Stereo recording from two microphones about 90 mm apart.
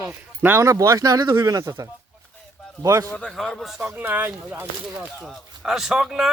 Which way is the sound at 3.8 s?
20° right (ahead or behind).